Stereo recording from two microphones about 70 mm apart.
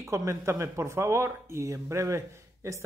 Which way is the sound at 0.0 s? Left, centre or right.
Right.